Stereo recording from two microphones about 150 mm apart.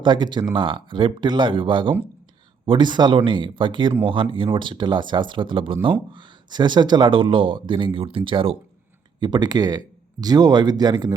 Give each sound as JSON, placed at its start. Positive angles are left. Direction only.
{"t": 0.0, "sound": "speech", "side_deg": -30}